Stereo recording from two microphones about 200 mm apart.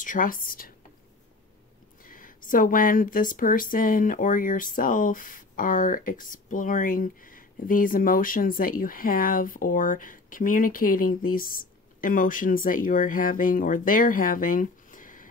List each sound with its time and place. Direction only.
0.0 s speech: 40° left (ahead or behind)
2.0 s speech: 45° left (ahead or behind)